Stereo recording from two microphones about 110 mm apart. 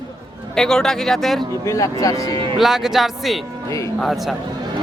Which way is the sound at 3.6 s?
30° left (ahead or behind).